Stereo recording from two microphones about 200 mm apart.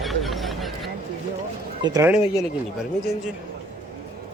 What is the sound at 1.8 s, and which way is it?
Speech, 20° right (ahead or behind).